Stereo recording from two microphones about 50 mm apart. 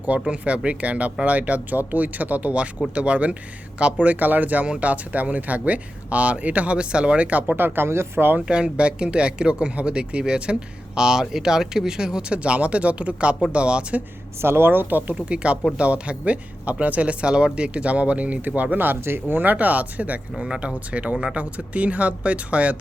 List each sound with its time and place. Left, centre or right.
0.1 s speech: right
7.4 s speech: right
7.9 s speech: right
8.4 s speech: right
14.4 s speech: right
15.1 s speech: right
20.4 s speech: centre